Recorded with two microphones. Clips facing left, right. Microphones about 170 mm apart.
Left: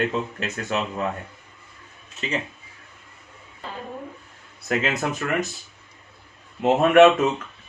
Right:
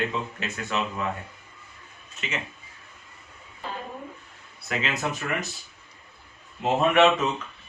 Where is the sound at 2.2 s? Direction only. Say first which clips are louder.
Left 6 dB; 35° left (ahead or behind).